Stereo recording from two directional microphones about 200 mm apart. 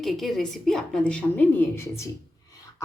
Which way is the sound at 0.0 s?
Centre (ahead or behind).